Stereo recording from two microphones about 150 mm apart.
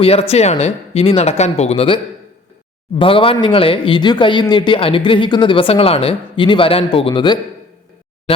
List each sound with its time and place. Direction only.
0.0 s speech: 40° left (ahead or behind)